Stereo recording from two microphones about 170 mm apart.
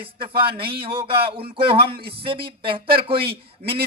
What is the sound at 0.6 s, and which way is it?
A man's voice, 30° right (ahead or behind).